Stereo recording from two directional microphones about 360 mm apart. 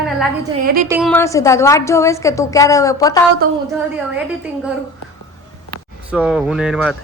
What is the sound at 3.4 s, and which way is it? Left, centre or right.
Speech, right.